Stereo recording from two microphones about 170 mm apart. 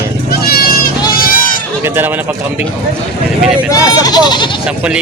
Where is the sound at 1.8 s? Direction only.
10° right (ahead or behind).